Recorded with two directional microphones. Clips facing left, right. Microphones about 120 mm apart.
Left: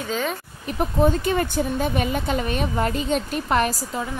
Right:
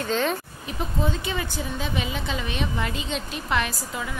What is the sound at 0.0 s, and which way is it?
Speech, 5° left (ahead or behind).